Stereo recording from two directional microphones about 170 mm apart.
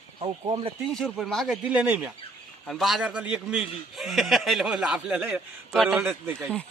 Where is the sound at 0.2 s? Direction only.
30° right (ahead or behind).